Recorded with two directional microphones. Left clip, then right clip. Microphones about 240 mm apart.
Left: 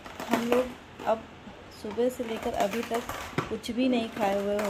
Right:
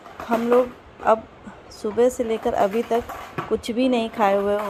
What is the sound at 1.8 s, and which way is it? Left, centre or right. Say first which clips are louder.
Speech: right 9 dB; right.